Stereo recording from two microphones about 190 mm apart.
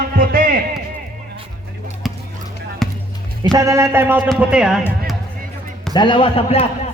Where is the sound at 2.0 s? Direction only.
Centre (ahead or behind).